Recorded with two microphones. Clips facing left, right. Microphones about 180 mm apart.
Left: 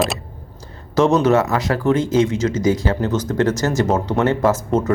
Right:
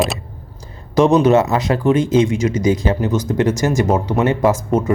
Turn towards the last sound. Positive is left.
turn(degrees=-10)  # may be behind; listen again after turning